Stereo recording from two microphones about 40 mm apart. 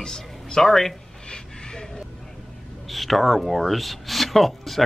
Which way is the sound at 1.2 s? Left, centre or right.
Centre.